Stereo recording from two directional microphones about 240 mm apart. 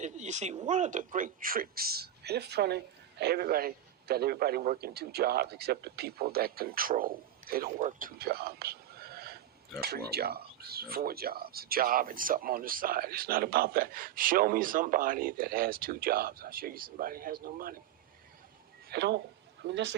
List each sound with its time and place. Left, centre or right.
0.0 s speech: right
18.9 s a man's voice: right